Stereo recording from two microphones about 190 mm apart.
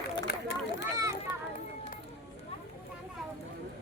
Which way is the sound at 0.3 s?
60° left (ahead or behind).